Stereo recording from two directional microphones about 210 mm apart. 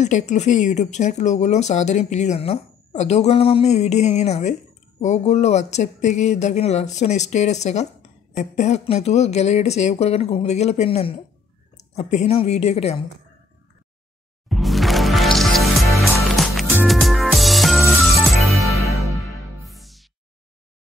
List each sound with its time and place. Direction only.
0.0 s a woman's voice: 35° left (ahead or behind)
14.5 s music: centre (ahead or behind)
18.7 s music: 15° left (ahead or behind)
19.1 s music: centre (ahead or behind)